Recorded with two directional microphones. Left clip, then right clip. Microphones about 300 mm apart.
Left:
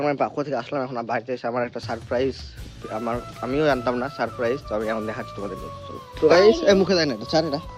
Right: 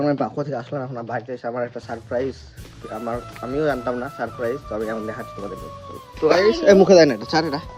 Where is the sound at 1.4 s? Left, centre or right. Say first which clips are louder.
Right 1 dB; left.